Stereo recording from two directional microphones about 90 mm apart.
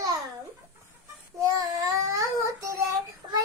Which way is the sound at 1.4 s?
40° right (ahead or behind).